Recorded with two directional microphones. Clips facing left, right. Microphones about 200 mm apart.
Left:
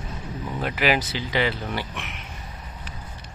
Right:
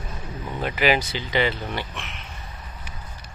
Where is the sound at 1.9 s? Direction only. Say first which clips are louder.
Left 1 dB; 15° left (ahead or behind).